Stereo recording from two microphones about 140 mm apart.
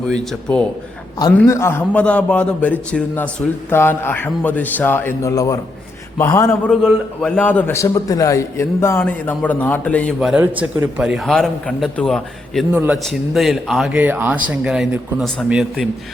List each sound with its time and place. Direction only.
0.1 s a man's voice: 5° left (ahead or behind)
1.5 s a man's voice: 20° left (ahead or behind)
6.7 s a man's voice: 5° left (ahead or behind)
10.2 s a man's voice: 5° right (ahead or behind)
10.4 s a man's voice: 15° right (ahead or behind); by 12.6 s 5° left (ahead or behind)
12.7 s speech: 15° right (ahead or behind)
13.0 s a man's voice: centre (ahead or behind)
14.0 s speech: 15° right (ahead or behind)